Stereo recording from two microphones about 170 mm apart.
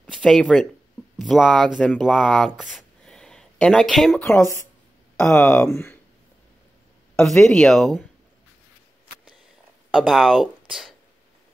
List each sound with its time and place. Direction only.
0.0 s speech: centre (ahead or behind)
4.3 s speech: 15° left (ahead or behind)
7.2 s speech: centre (ahead or behind)
9.8 s speech: centre (ahead or behind)